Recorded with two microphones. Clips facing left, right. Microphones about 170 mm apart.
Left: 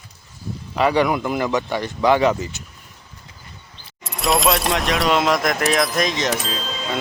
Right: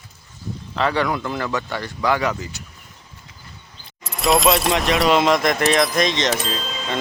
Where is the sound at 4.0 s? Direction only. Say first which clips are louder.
Right 2 dB; centre (ahead or behind).